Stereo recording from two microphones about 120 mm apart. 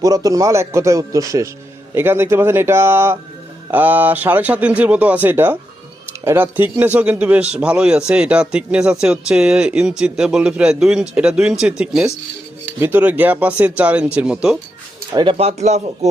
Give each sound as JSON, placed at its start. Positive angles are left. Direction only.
{"t": 0.0, "sound": "a man's voice", "side_deg": -30}
{"t": 12.8, "sound": "speech", "side_deg": -15}
{"t": 15.1, "sound": "speech", "side_deg": -40}
{"t": 15.4, "sound": "speech", "side_deg": -65}